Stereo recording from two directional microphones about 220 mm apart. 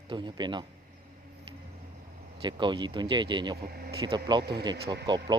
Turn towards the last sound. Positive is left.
turn(degrees=-50)  # may be behind; listen again after turning